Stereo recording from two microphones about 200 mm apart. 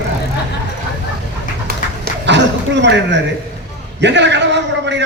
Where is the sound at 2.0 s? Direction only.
60° right (ahead or behind).